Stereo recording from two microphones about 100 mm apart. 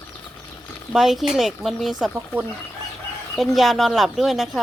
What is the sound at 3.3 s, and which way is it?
Speech, centre (ahead or behind).